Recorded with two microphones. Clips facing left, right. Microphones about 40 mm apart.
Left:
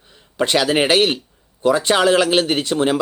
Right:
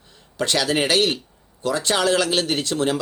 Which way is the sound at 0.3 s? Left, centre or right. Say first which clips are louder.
Left 4 dB; left.